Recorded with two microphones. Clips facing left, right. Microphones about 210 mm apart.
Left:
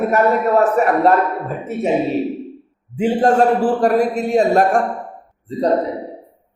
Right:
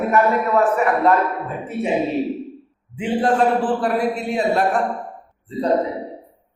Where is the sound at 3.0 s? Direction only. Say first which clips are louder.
Left 4 dB; 45° left (ahead or behind).